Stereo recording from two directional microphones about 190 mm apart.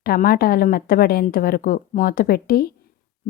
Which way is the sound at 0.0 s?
50° left (ahead or behind).